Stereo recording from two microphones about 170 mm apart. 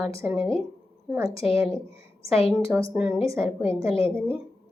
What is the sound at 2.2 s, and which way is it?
Speech, centre (ahead or behind).